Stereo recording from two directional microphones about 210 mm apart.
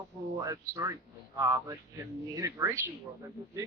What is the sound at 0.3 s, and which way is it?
Speech, 15° right (ahead or behind).